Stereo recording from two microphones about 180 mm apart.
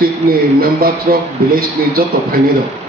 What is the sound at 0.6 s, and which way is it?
A man's voice, 55° right (ahead or behind).